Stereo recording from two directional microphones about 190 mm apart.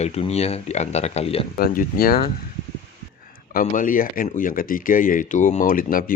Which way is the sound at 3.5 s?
45° left (ahead or behind).